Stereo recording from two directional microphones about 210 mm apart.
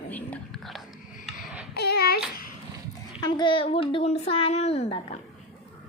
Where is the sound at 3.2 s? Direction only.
20° left (ahead or behind).